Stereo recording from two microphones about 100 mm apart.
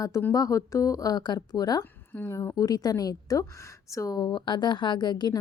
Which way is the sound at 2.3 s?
30° left (ahead or behind).